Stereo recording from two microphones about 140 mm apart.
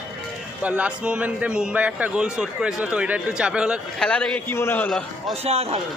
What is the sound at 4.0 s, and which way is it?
A man's voice, 10° left (ahead or behind).